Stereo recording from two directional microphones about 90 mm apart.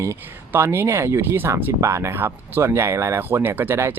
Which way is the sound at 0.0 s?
30° right (ahead or behind).